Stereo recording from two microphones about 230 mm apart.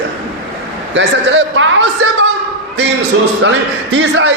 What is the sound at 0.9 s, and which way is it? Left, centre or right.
Speech, right.